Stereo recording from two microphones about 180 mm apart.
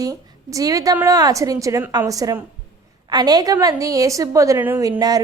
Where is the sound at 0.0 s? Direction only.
20° right (ahead or behind).